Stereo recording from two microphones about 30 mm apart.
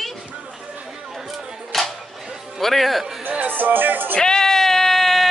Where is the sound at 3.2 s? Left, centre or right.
Right.